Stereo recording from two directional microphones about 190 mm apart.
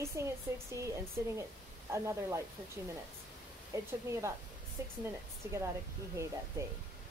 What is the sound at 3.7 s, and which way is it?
Speech, 15° right (ahead or behind).